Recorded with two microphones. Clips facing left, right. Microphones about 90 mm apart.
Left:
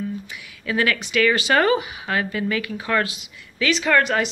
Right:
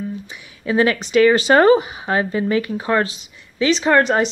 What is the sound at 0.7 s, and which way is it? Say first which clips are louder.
Speech: right 5 dB; 30° right (ahead or behind).